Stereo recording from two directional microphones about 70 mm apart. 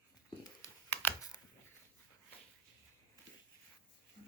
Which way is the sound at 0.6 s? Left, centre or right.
Left.